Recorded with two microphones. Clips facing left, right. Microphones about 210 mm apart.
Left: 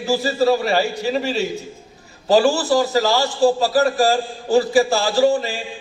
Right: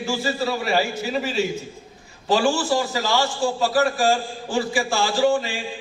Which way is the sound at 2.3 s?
40° left (ahead or behind).